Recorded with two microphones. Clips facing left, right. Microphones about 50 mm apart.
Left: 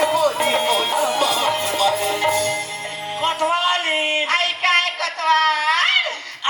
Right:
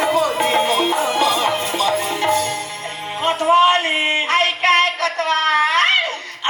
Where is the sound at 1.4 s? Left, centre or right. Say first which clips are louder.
Even; right.